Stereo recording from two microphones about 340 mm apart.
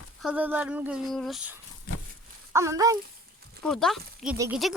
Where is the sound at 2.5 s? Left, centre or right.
Centre.